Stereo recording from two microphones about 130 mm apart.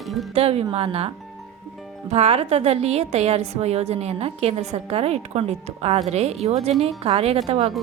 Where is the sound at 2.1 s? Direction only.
50° right (ahead or behind).